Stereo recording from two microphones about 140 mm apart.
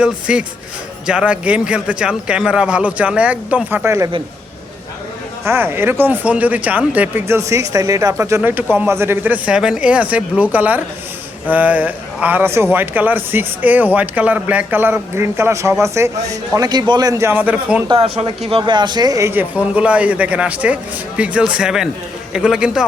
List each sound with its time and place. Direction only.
0.0 s a man's voice: 5° right (ahead or behind)
5.5 s a man's voice: 15° right (ahead or behind)
17.8 s speech: 40° right (ahead or behind)
19.3 s a man's voice: 10° right (ahead or behind)